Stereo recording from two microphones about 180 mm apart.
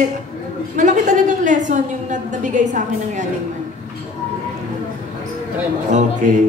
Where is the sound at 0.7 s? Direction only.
40° right (ahead or behind).